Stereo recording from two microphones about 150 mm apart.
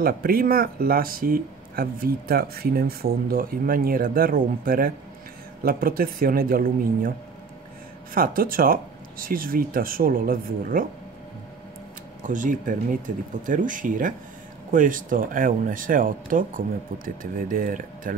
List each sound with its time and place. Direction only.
0.0 s speech: 80° right
8.1 s speech: 70° right (ahead or behind)
12.2 s speech: 60° right (ahead or behind)